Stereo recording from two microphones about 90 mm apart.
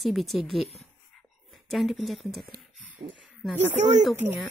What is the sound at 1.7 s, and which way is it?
Speech, centre (ahead or behind).